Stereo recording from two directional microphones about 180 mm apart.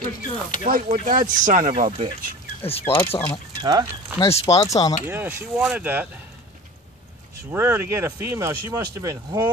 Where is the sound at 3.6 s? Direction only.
20° right (ahead or behind).